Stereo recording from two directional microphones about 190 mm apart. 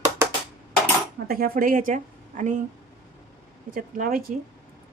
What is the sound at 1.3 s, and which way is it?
A woman's voice, 50° right (ahead or behind).